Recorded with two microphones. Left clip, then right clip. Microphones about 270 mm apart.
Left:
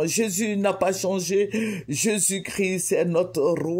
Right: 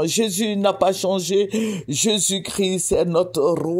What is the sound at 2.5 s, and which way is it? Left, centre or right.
Speech, right.